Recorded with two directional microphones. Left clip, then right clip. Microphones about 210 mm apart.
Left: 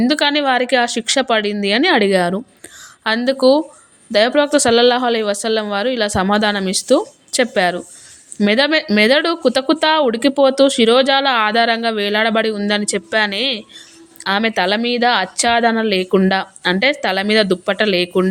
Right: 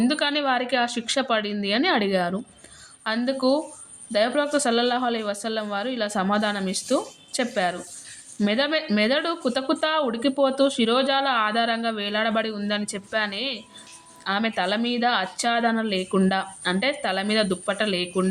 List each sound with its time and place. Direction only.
0.0 s speech: 40° left (ahead or behind)